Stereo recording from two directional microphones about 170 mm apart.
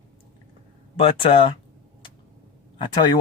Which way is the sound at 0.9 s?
30° left (ahead or behind).